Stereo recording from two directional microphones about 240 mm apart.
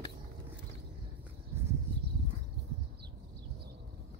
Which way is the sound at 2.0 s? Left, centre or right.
Right.